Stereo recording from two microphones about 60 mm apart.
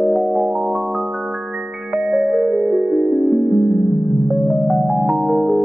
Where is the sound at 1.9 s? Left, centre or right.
Centre.